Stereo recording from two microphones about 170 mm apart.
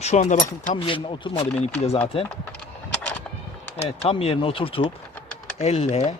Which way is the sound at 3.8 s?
35° left (ahead or behind).